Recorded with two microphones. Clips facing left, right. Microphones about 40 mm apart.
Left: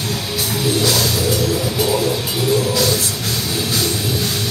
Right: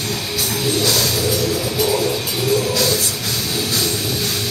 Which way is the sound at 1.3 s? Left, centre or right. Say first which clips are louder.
Left 1 dB; left.